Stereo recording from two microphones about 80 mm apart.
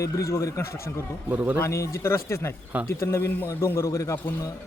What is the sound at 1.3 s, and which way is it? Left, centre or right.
Speech, right.